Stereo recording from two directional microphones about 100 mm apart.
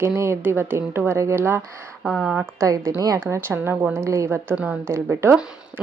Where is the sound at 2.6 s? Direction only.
30° right (ahead or behind).